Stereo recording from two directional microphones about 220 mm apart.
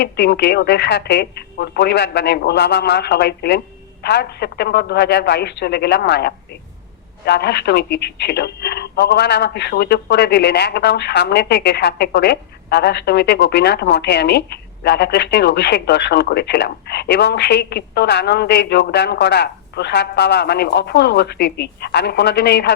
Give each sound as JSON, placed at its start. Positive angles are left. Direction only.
{"t": 0.0, "sound": "speech", "side_deg": 50}